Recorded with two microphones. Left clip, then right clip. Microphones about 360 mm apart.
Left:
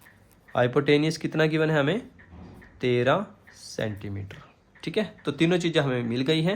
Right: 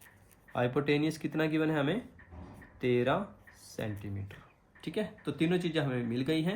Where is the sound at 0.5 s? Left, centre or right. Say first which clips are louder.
Left 8 dB; left.